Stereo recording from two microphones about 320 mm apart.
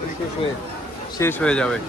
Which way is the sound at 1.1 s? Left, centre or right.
Centre.